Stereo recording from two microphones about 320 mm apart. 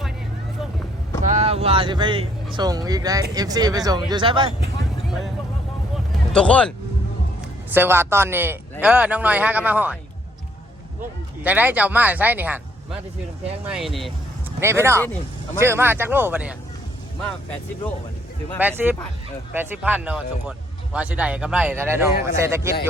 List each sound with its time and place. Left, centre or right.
1.2 s speech: right
6.1 s a sound: centre
7.7 s speech: centre
11.4 s speech: centre
13.7 s speech: centre
18.6 s speech: centre